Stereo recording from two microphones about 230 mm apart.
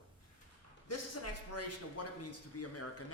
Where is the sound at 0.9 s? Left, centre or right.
Left.